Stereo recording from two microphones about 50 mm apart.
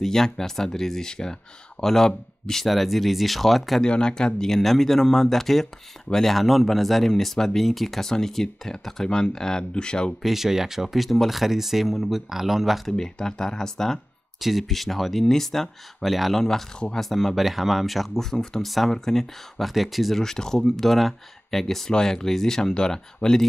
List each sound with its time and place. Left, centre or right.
0.0 s speech: centre
3.8 s speech: centre
10.2 s speech: centre
12.9 s speech: centre
14.4 s speech: centre